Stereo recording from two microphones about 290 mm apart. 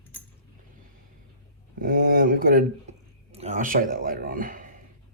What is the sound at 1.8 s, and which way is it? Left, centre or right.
Speech, right.